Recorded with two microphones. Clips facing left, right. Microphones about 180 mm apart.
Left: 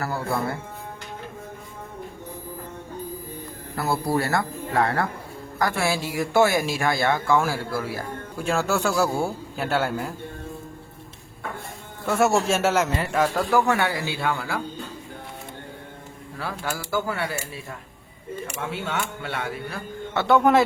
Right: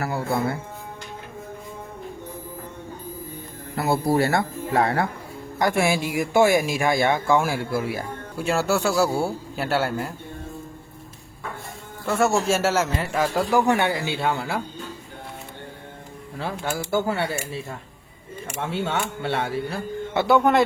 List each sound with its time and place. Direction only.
0.0 s speech: 20° right (ahead or behind)
3.8 s speech: 25° right (ahead or behind)
8.4 s a man's voice: 5° right (ahead or behind)
12.0 s a man's voice: centre (ahead or behind)
13.5 s speech: 20° right (ahead or behind)
16.4 s speech: 25° right (ahead or behind)
20.1 s a man's voice: 5° right (ahead or behind)